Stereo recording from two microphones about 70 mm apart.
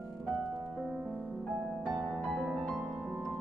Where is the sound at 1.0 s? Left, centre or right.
Centre.